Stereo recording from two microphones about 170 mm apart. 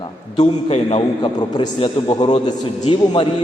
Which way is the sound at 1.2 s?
25° left (ahead or behind).